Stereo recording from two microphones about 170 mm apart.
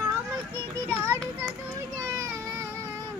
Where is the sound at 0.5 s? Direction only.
15° right (ahead or behind).